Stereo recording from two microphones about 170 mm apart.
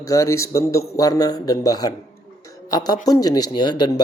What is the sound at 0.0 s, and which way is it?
Speech, 20° left (ahead or behind).